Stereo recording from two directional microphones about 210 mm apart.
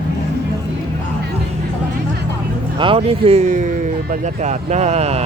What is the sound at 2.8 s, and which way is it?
Speech, 25° right (ahead or behind).